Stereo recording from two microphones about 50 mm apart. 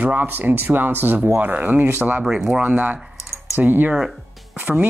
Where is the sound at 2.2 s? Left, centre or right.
Centre.